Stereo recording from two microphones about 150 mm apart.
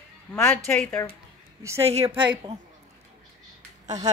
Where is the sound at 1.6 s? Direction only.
20° right (ahead or behind).